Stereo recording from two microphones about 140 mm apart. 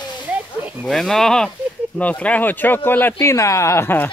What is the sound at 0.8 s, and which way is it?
Speech, 5° left (ahead or behind).